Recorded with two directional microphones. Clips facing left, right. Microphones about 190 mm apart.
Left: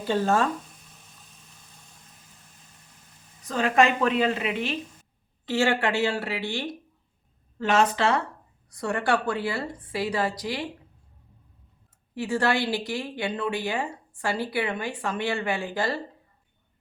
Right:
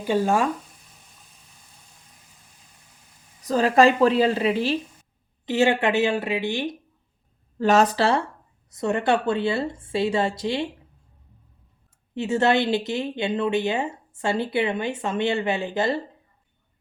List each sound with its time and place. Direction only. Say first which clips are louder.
0.0 s speech: right 2 dB; 15° right (ahead or behind)
3.4 s speech: right 5 dB; 35° right (ahead or behind)
5.5 s speech: right 4 dB; 20° right (ahead or behind)
7.6 s speech: right 4 dB; 40° right (ahead or behind)
8.7 s speech: right 4 dB; 20° right (ahead or behind)
12.1 s speech: right 4 dB; 25° right (ahead or behind)